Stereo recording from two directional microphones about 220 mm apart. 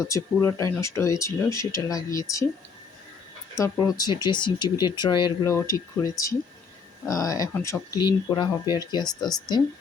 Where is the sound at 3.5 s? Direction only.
15° left (ahead or behind).